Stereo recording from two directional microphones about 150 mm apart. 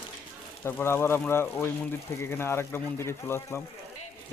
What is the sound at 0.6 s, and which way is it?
Speech, 15° left (ahead or behind).